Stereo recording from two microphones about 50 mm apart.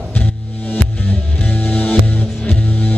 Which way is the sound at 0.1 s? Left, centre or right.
Left.